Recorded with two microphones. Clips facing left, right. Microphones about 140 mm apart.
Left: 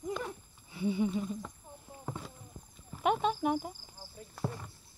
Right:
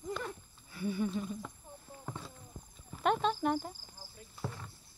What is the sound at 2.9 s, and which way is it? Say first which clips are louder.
Cricket: left 1 dB; 10° left (ahead or behind).